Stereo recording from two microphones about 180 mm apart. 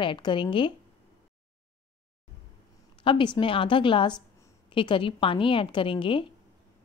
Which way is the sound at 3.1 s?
30° left (ahead or behind).